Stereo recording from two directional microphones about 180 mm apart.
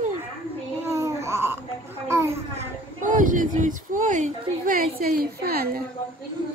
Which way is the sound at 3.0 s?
45° right (ahead or behind).